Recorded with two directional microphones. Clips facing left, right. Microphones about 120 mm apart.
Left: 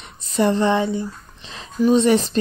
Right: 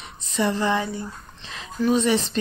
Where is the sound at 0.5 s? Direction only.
25° left (ahead or behind).